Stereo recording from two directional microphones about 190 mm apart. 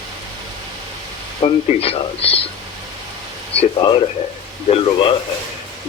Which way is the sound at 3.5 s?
30° left (ahead or behind).